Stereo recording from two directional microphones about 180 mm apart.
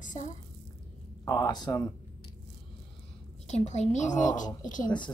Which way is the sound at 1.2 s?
20° left (ahead or behind).